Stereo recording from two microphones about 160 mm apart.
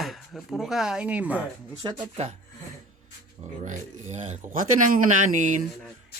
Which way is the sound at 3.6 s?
50° right (ahead or behind).